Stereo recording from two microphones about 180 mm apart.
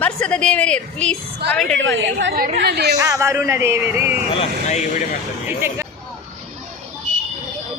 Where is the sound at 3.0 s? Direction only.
15° right (ahead or behind).